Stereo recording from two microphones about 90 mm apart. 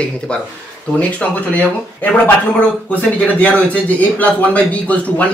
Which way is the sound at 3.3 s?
15° left (ahead or behind).